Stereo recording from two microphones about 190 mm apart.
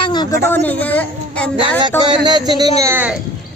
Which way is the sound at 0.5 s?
10° left (ahead or behind).